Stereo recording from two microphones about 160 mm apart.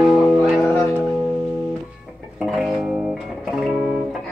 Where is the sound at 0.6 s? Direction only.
15° left (ahead or behind).